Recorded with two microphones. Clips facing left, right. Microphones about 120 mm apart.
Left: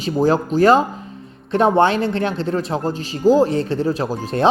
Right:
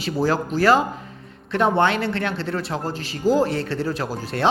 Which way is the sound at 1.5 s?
35° left (ahead or behind).